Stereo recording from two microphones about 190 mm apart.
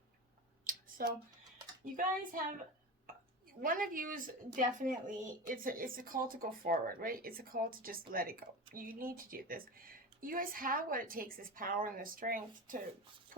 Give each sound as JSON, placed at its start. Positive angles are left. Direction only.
{"t": 0.6, "sound": "a sound", "side_deg": -45}
{"t": 1.8, "sound": "speech", "side_deg": -45}
{"t": 3.6, "sound": "speech", "side_deg": -45}